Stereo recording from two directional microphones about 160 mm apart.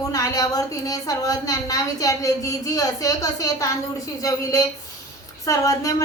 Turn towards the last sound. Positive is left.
turn(degrees=20)  # may be behind; listen again after turning